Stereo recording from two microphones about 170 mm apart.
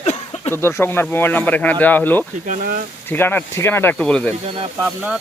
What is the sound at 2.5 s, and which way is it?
Speech, 55° right (ahead or behind).